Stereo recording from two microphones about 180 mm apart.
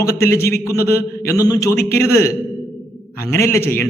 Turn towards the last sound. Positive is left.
turn(degrees=10)  # may be behind; listen again after turning